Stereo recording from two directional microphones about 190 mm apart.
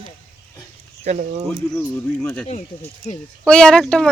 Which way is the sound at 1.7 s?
10° left (ahead or behind).